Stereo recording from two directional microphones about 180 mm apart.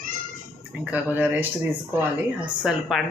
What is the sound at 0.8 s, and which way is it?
Speech, 10° right (ahead or behind).